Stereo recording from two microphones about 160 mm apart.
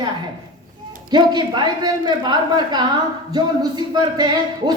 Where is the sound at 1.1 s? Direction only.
25° right (ahead or behind).